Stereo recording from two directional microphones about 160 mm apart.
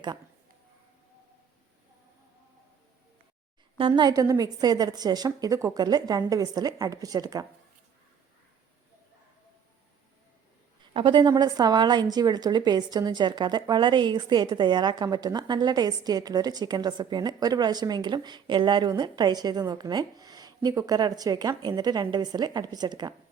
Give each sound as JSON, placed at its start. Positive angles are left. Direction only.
{"t": 3.8, "sound": "a woman's voice", "side_deg": -30}
{"t": 10.9, "sound": "a woman's voice", "side_deg": -30}